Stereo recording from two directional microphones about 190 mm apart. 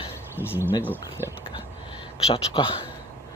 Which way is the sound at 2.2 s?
30° left (ahead or behind).